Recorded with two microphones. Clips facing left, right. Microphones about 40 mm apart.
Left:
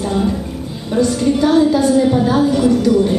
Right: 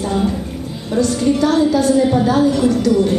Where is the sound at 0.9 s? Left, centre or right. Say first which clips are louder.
Left 1 dB; centre.